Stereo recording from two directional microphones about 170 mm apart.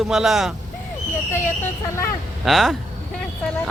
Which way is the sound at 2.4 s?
Centre (ahead or behind).